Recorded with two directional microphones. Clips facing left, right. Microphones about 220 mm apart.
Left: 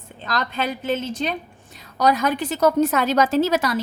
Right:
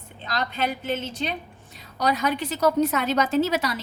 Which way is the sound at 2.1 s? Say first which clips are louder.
Left 4 dB; 50° left (ahead or behind).